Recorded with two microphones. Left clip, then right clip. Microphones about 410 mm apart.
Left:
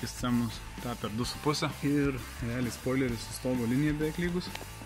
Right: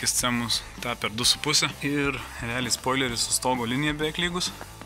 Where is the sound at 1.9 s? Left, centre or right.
Centre.